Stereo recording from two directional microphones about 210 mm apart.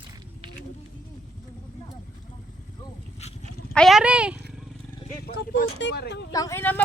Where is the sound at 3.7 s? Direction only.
Centre (ahead or behind).